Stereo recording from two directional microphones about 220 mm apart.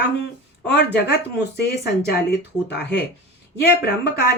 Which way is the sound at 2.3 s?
50° left (ahead or behind).